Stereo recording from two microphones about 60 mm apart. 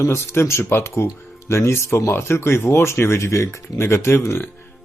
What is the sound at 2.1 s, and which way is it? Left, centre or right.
Speech, left.